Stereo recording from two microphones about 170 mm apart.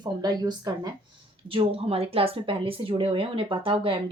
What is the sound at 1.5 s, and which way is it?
A woman's voice, 35° right (ahead or behind).